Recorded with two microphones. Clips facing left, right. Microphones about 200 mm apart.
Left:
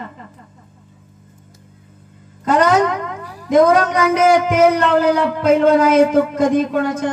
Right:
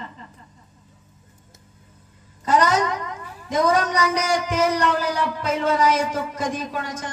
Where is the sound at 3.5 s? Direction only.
60° left (ahead or behind).